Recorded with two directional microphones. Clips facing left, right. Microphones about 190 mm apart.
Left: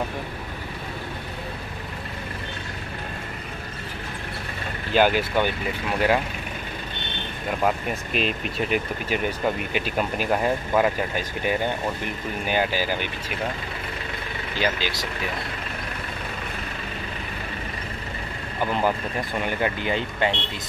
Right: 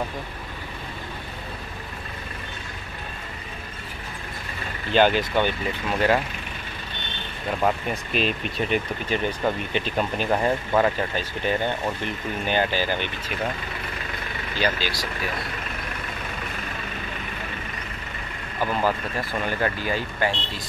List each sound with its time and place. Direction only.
4.9 s speech: 10° left (ahead or behind)
7.6 s speech: centre (ahead or behind)
14.6 s speech: 20° left (ahead or behind)
18.7 s speech: 15° left (ahead or behind)